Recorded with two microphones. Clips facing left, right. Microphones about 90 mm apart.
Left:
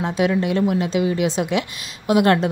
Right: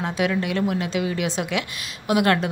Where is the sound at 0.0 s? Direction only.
25° left (ahead or behind).